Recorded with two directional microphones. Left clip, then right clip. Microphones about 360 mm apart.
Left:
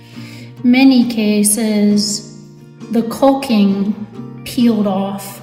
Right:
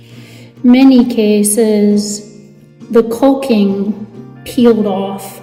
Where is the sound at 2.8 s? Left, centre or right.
Centre.